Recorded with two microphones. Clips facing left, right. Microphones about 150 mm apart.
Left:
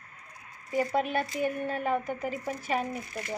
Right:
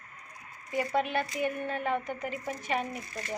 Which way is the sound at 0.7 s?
40° left (ahead or behind).